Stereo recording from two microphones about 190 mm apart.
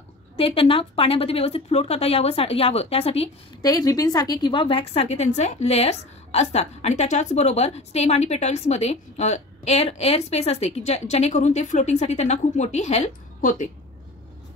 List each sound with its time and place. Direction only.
0.4 s a woman's voice: 30° left (ahead or behind)
3.6 s a woman's voice: 20° left (ahead or behind); by 13.7 s 40° left (ahead or behind)